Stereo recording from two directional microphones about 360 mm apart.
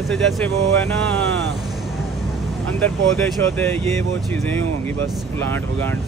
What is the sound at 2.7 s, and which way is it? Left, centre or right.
Speech, centre.